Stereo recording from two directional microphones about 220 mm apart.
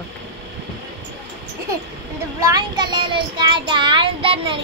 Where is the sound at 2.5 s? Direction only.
20° right (ahead or behind).